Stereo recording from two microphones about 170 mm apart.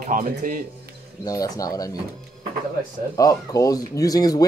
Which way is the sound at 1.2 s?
20° left (ahead or behind).